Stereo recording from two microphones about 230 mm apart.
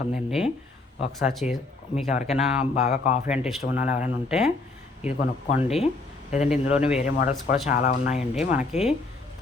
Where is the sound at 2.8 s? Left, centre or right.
Left.